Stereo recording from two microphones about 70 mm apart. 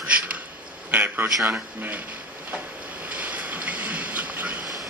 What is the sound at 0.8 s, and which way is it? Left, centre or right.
Speech, right.